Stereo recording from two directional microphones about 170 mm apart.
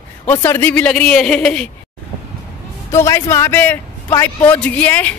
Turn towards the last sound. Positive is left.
turn(degrees=10)  # may be behind; listen again after turning